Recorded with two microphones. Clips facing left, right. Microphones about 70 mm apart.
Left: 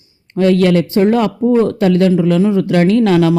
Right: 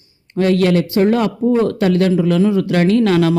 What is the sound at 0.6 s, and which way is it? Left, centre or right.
A man's voice, left.